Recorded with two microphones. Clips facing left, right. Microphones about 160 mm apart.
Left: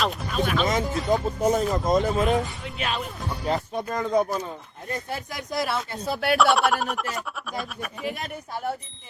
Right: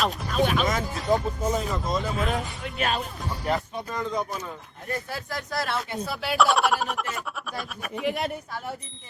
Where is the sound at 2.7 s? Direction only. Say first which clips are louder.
Right 2 dB; 45° right (ahead or behind).